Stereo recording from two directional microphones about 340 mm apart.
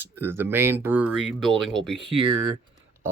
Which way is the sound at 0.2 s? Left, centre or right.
Centre.